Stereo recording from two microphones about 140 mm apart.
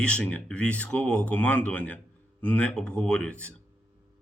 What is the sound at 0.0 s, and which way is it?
Speech, 10° left (ahead or behind).